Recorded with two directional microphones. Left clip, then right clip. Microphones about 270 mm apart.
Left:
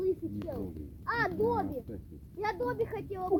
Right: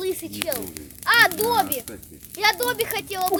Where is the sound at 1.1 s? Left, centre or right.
Right.